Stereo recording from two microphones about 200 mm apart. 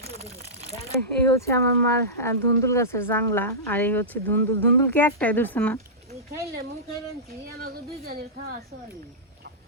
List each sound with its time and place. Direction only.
0.0 s a sound: 30° right (ahead or behind)
0.9 s speech: 15° left (ahead or behind)
7.6 s speech: 45° right (ahead or behind)